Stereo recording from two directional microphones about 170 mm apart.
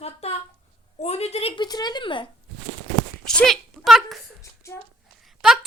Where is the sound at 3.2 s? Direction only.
Centre (ahead or behind).